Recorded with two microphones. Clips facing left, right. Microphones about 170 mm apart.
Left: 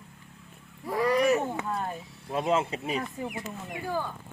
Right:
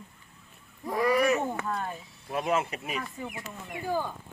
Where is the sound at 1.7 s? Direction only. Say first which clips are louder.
Left 2 dB; 25° left (ahead or behind).